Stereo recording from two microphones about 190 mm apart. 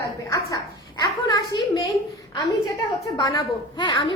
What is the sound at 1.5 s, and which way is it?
Speech, 20° left (ahead or behind).